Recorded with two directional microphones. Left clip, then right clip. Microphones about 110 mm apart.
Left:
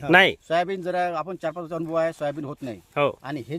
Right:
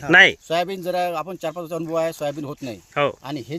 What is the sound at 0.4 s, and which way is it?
Speech, 25° right (ahead or behind).